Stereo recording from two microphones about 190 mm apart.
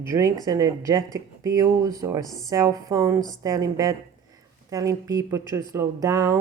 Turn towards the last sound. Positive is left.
turn(degrees=-15)  # may be behind; listen again after turning